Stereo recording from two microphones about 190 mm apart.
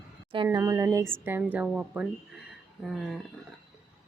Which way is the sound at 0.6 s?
15° right (ahead or behind).